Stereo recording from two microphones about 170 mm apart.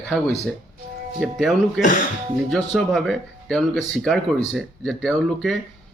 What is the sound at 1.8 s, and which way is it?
Speech, 50° left (ahead or behind).